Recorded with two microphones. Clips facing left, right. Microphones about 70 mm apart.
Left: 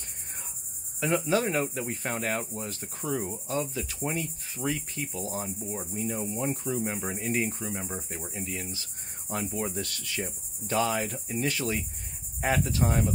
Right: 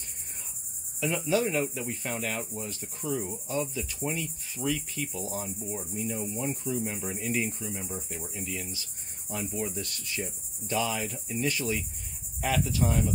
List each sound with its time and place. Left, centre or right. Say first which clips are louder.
1.0 s cricket: left 1 dB; left
5.9 s cricket: left 2 dB; left
12.4 s cricket: left 1 dB; left